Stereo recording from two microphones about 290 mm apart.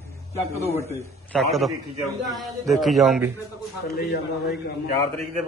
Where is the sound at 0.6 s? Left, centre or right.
Centre.